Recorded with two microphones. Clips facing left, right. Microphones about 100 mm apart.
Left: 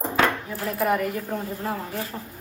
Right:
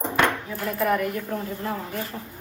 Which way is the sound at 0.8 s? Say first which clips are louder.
Even; 25° left (ahead or behind).